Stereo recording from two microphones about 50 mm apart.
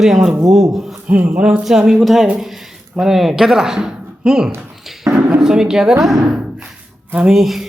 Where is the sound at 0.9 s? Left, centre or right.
Right.